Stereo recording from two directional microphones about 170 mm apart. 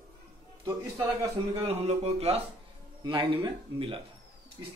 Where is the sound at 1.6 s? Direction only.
35° right (ahead or behind).